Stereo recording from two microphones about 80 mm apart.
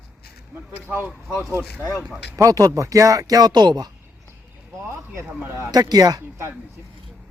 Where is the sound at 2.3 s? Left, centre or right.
Right.